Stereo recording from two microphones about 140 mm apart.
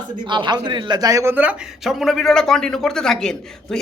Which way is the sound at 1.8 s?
Centre (ahead or behind).